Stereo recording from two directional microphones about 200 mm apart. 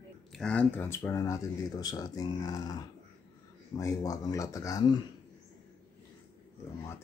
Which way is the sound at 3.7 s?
15° left (ahead or behind).